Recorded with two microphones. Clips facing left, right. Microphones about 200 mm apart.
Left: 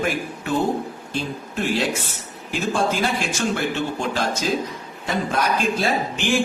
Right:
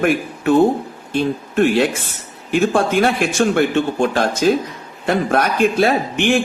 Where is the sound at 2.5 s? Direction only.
60° right (ahead or behind).